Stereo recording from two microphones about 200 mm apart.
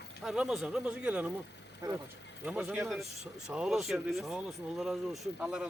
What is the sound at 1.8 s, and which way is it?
Speech, 20° right (ahead or behind).